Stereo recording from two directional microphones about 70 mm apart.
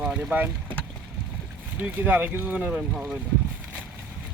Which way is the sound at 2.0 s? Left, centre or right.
Right.